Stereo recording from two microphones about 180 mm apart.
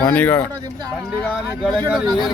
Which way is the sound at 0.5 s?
20° right (ahead or behind).